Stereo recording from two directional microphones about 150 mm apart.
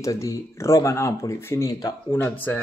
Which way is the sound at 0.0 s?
20° left (ahead or behind).